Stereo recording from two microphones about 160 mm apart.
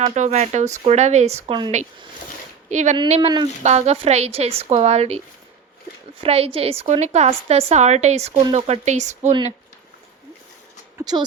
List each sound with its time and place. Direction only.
0.0 s speech: 45° right (ahead or behind)
2.6 s speech: 50° right (ahead or behind)
3.2 s speech: 30° right (ahead or behind)
3.6 s speech: 45° right (ahead or behind)
6.2 s a woman's voice: 40° right (ahead or behind)
10.9 s speech: 25° right (ahead or behind)